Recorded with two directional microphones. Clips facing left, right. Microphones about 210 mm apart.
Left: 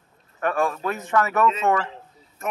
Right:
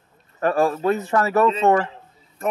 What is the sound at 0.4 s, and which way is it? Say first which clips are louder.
Speech: right 4 dB; 35° right (ahead or behind).